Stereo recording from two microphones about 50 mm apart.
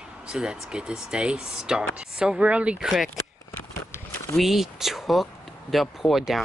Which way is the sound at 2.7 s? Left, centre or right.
Centre.